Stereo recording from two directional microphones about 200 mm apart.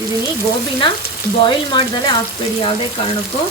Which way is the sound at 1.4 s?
25° left (ahead or behind).